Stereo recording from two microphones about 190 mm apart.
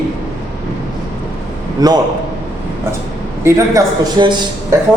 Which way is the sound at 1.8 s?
20° right (ahead or behind).